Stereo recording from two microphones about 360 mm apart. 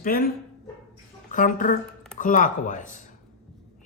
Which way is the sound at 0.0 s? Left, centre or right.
Left.